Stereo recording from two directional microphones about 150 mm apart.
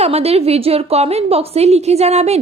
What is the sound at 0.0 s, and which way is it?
A woman's voice, 45° right (ahead or behind).